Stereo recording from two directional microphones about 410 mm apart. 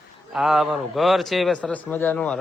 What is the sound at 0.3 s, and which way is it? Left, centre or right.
A man's voice, centre.